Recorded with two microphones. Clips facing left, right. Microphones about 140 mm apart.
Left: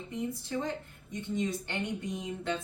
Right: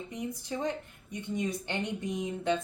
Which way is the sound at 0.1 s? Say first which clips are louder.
Left 4 dB; 15° right (ahead or behind).